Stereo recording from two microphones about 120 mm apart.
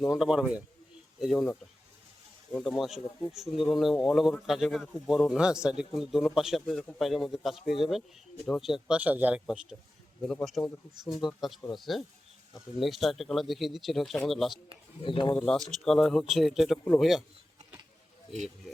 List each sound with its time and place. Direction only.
0.0 s speech: 5° right (ahead or behind)
2.5 s a man's voice: 5° left (ahead or behind)
9.0 s a man's voice: 15° right (ahead or behind)
10.6 s speech: 5° left (ahead or behind)
15.0 s speech: 45° left (ahead or behind)
15.4 s speech: centre (ahead or behind)